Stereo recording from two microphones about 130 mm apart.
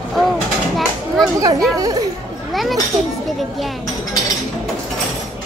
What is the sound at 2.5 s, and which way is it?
Speech, centre (ahead or behind).